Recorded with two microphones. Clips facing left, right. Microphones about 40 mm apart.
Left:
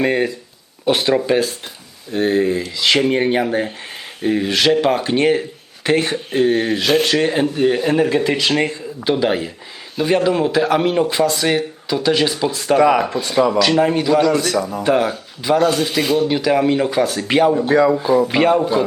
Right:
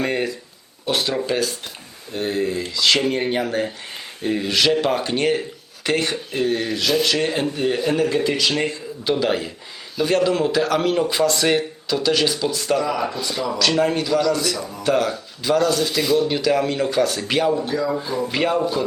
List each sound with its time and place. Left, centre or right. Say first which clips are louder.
0.0 s speech: left 5 dB; centre
2.1 s speech: left 6 dB; left
2.7 s speech: left 2 dB; left
6.3 s speech: left 7 dB; left
7.5 s speech: left 5 dB; centre
9.0 s speech: left 3 dB; centre
12.7 s speech: left 10 dB; left
13.6 s speech: left 4 dB; centre
14.1 s speech: left 5 dB; left
14.8 s speech: left 2 dB; centre
15.6 s speech: left 3 dB; left
16.3 s speech: left 4 dB; centre
17.7 s speech: left 9 dB; left
18.3 s speech: left 5 dB; left